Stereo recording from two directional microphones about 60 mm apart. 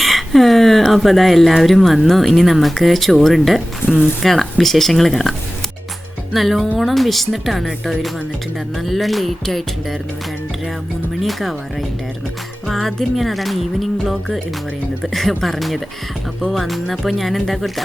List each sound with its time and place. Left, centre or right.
0.0 s speech: centre
3.8 s speech: left
4.2 s speech: centre
6.3 s speech: centre
11.2 s speech: centre